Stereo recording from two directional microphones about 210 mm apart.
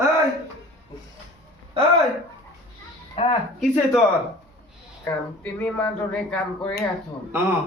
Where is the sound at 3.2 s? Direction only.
30° left (ahead or behind).